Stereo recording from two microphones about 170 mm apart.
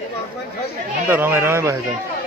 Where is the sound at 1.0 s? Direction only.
10° right (ahead or behind).